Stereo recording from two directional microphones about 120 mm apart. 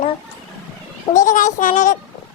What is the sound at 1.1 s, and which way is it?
Speech, 90° left.